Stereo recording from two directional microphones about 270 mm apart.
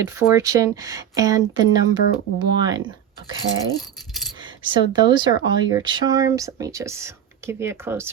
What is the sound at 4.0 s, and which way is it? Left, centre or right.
Keys jangling, centre.